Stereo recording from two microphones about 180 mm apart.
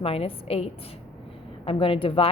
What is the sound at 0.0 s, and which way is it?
A woman's voice, 30° left (ahead or behind).